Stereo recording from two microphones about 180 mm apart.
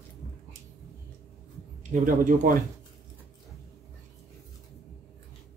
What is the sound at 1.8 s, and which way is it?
Speech, 45° right (ahead or behind).